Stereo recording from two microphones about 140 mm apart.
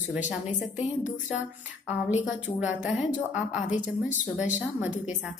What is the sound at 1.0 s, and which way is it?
Speech, 10° right (ahead or behind).